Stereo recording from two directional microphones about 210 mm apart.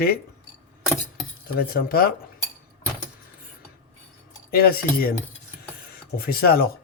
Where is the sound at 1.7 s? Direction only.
45° left (ahead or behind).